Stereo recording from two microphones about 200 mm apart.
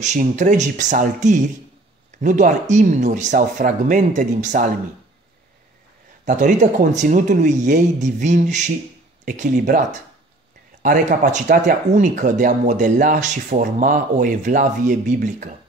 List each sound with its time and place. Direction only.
0.0 s speech: 35° right (ahead or behind)
6.2 s speech: 40° right (ahead or behind)